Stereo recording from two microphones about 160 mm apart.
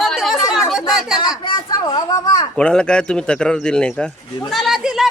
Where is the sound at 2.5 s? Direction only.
5° left (ahead or behind).